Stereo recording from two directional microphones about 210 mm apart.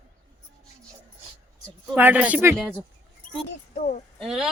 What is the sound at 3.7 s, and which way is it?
Speech, 35° left (ahead or behind).